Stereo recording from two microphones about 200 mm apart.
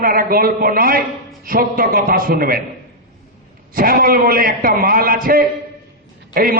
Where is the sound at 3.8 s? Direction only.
45° right (ahead or behind).